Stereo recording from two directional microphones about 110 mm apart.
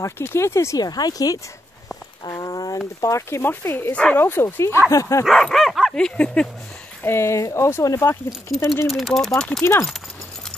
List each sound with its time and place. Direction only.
0.0 s speech: 25° left (ahead or behind)
5.2 s dog: centre (ahead or behind)
7.0 s speech: 20° left (ahead or behind)
8.8 s dog: centre (ahead or behind)
9.6 s speech: 25° left (ahead or behind)